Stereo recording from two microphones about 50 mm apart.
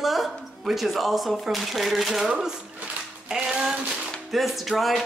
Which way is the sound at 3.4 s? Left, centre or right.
Centre.